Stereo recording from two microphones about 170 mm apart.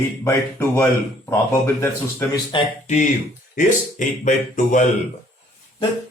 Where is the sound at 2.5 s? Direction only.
40° left (ahead or behind).